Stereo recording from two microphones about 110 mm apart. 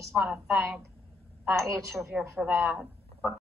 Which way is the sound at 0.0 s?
25° right (ahead or behind).